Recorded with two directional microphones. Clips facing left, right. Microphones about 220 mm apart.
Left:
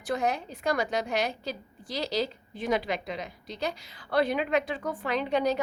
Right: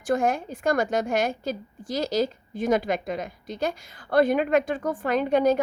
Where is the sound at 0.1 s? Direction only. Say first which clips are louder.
Right 5 dB; 50° right (ahead or behind).